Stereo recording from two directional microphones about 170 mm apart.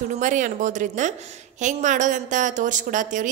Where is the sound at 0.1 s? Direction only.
50° right (ahead or behind).